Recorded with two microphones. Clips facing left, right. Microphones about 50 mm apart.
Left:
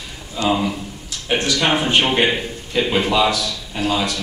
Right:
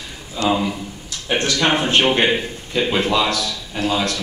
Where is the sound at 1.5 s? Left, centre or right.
Centre.